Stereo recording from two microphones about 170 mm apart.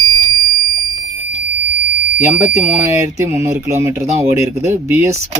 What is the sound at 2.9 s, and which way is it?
Speech, 15° right (ahead or behind).